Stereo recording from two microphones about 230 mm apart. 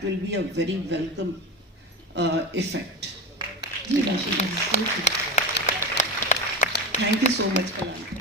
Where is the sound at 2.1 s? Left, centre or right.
Right.